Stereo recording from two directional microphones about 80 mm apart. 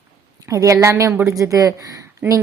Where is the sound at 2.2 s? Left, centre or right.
Right.